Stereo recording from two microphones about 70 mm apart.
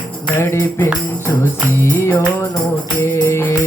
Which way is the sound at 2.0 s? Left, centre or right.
Left.